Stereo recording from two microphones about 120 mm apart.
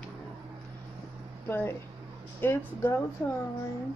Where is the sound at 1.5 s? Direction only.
20° left (ahead or behind).